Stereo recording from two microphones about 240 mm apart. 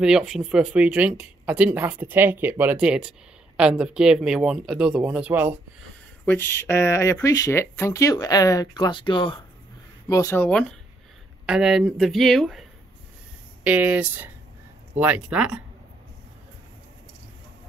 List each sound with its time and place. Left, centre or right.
0.0 s speech: centre
6.2 s speech: centre
13.7 s speech: centre